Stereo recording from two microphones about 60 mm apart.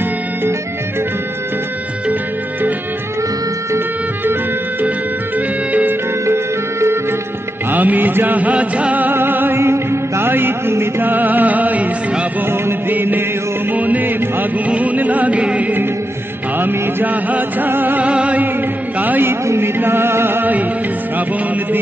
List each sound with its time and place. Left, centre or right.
5.7 s music: right
6.2 s music: right
7.7 s music: right
12.4 s music: right
18.0 s music: right
19.4 s music: right